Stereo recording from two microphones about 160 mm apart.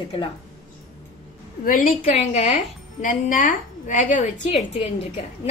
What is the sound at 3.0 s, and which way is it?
A woman's voice, 55° left (ahead or behind).